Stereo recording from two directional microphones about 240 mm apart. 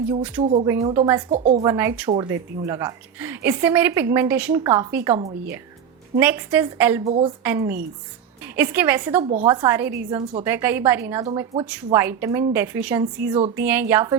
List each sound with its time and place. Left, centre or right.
0.4 s speech: right
0.9 s a woman's voice: centre
1.3 s speech: right
1.6 s a woman's voice: centre
6.1 s a woman's voice: centre
7.0 s speech: right
7.4 s a woman's voice: centre
9.2 s speech: right
9.5 s a woman's voice: centre
11.5 s speech: right
11.9 s a woman's voice: centre